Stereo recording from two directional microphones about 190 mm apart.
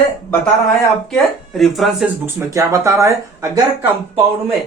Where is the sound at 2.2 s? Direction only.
15° right (ahead or behind).